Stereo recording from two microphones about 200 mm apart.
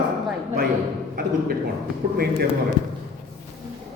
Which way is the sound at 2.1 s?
50° right (ahead or behind).